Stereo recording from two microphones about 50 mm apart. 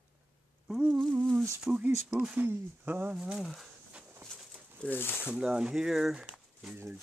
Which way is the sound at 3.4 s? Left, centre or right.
Centre.